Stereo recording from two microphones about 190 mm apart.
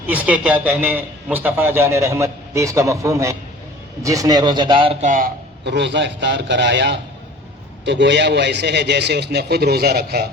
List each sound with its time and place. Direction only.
0.1 s a man's voice: 10° right (ahead or behind); by 5.3 s 40° right (ahead or behind)
5.6 s a man's voice: 65° right (ahead or behind)